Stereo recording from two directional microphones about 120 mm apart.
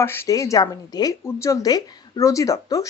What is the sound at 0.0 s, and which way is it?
A woman's voice, 25° left (ahead or behind).